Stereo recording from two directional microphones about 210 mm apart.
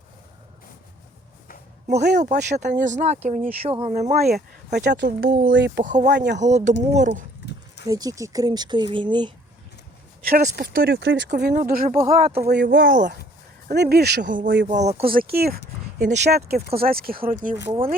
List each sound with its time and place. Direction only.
1.9 s speech: 50° right (ahead or behind)
2.6 s speech: 35° right (ahead or behind)
4.7 s speech: 50° right (ahead or behind)
5.8 s speech: 35° right (ahead or behind)
6.1 s speech: 55° right (ahead or behind)
6.3 s speech: 35° right (ahead or behind)
7.9 s speech: 15° right (ahead or behind)
10.3 s speech: 45° right (ahead or behind)
12.0 s speech: 30° right (ahead or behind)
12.5 s speech: 55° right (ahead or behind)
13.7 s speech: 50° right (ahead or behind); by 15.1 s 30° right (ahead or behind)
15.1 s speech: 45° right (ahead or behind)
17.5 s speech: 35° right (ahead or behind)